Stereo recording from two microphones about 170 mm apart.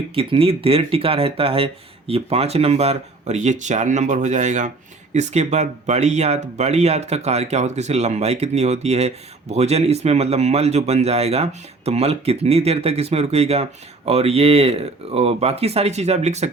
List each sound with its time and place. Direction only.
0.1 s speech: 35° right (ahead or behind)